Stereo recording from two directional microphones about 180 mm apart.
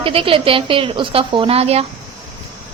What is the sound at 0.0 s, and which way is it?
A woman's voice, 30° right (ahead or behind).